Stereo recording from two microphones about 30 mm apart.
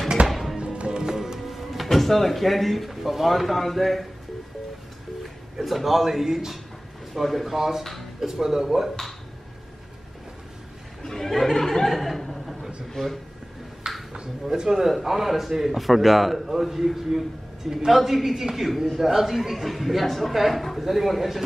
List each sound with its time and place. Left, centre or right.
0.3 s music: centre
0.7 s music: right
1.1 s speech: centre
5.6 s speech: centre
7.5 s a man's voice: centre
11.0 s speech: centre
11.3 s a sound: centre
11.9 s chuckle: centre
12.9 s speech: centre
13.9 s a sound: centre
14.5 s a man's voice: centre